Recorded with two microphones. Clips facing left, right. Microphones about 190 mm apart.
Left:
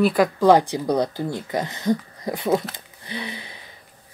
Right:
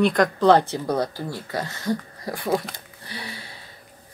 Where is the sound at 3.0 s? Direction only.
20° left (ahead or behind).